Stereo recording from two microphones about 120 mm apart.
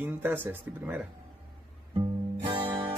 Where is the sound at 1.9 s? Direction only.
40° right (ahead or behind).